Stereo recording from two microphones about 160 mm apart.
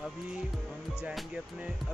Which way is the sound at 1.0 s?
5° right (ahead or behind).